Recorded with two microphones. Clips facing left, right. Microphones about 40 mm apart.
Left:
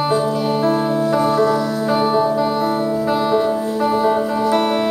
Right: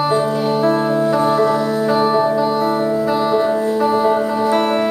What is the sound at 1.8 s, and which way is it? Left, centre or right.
Music, centre.